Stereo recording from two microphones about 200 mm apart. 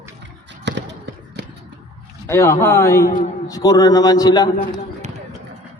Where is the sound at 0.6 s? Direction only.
60° right (ahead or behind).